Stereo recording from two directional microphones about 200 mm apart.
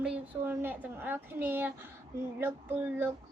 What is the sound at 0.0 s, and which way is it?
A woman's voice, 5° right (ahead or behind).